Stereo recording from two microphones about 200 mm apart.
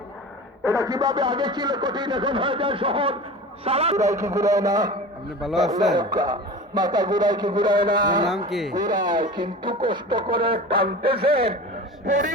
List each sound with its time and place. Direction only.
0.6 s a man's voice: 15° right (ahead or behind)
3.9 s a man's voice: 15° right (ahead or behind)
8.4 s speech: centre (ahead or behind)
8.7 s a man's voice: 20° right (ahead or behind)
12.0 s speech: 40° right (ahead or behind)